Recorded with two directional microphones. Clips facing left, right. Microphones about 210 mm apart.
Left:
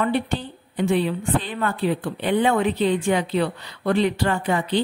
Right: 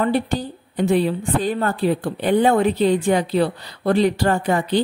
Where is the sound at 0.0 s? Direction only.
40° right (ahead or behind).